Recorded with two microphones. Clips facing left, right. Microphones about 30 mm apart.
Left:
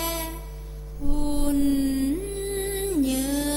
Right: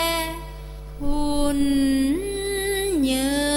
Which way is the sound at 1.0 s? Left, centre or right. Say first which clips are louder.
Right 4 dB; right.